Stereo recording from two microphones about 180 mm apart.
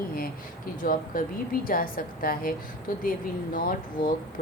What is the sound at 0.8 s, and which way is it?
Speech, 50° left (ahead or behind).